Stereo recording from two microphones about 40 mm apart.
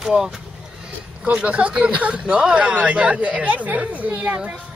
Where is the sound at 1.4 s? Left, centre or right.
Right.